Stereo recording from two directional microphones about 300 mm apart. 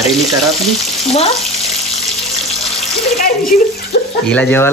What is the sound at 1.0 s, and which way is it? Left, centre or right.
Frying, left.